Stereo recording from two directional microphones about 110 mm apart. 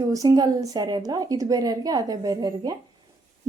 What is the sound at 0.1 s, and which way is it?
A woman's voice, 35° right (ahead or behind).